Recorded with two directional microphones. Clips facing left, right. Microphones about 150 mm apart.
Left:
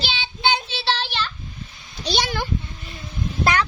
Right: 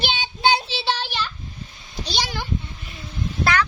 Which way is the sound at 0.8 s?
15° right (ahead or behind).